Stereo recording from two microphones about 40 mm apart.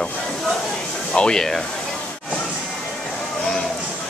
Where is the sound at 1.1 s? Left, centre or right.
Left.